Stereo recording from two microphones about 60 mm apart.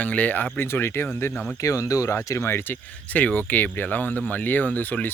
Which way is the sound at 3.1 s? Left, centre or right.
Left.